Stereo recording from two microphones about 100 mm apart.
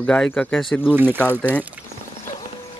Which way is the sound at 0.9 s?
20° right (ahead or behind).